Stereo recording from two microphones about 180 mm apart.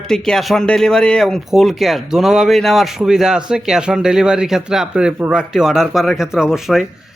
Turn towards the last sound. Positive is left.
turn(degrees=0)  # may be behind; listen again after turning